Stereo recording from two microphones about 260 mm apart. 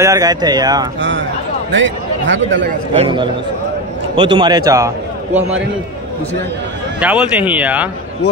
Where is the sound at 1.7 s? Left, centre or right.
Right.